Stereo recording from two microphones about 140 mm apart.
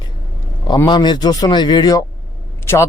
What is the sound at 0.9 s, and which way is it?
A man's voice, 30° left (ahead or behind).